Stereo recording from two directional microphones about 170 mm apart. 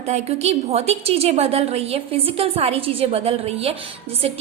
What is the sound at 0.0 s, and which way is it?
A woman's voice, 40° right (ahead or behind).